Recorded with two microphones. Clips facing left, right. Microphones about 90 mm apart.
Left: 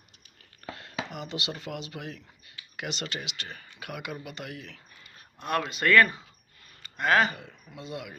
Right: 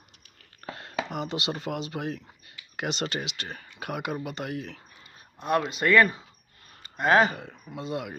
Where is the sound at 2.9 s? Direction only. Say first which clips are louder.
Right 5 dB; 25° right (ahead or behind).